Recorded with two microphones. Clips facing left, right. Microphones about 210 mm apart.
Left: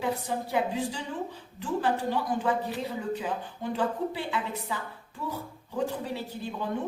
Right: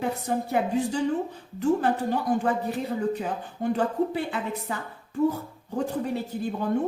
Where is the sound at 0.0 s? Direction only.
45° right (ahead or behind).